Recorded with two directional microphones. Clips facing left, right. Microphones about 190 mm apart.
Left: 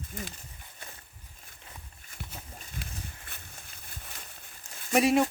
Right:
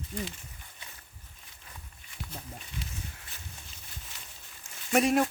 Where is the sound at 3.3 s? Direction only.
55° left (ahead or behind).